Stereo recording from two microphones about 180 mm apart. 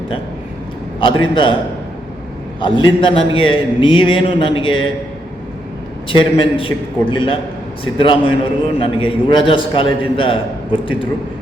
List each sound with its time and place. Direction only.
0.9 s a man's voice: 30° left (ahead or behind)
2.6 s a man's voice: 25° left (ahead or behind)
6.1 s a man's voice: 30° left (ahead or behind)